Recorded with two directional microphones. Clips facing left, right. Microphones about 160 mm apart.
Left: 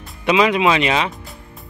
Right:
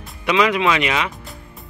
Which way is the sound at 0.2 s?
25° left (ahead or behind).